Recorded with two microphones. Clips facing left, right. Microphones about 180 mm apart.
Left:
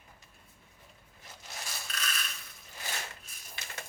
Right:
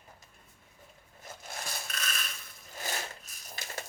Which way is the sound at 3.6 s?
40° right (ahead or behind).